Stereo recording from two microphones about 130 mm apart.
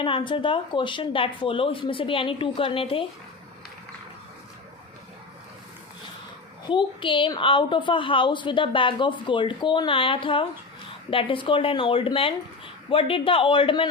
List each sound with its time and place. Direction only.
0.0 s a woman's voice: 40° left (ahead or behind)
6.7 s a woman's voice: 40° left (ahead or behind)